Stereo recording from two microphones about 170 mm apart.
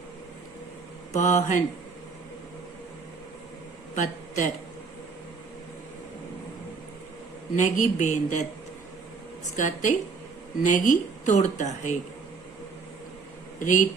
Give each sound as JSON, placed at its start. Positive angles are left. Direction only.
{"t": 1.1, "sound": "speech", "side_deg": 45}
{"t": 3.9, "sound": "a man's voice", "side_deg": 45}
{"t": 7.5, "sound": "speech", "side_deg": 45}
{"t": 9.6, "sound": "speech", "side_deg": 45}
{"t": 13.6, "sound": "speech", "side_deg": 50}